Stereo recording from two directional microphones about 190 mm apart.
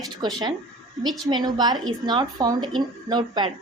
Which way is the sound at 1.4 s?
20° right (ahead or behind).